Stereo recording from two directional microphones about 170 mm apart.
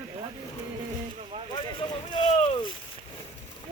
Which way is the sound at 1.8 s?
30° left (ahead or behind).